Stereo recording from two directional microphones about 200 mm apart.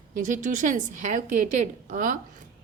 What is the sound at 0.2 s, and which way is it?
Speech, 40° right (ahead or behind).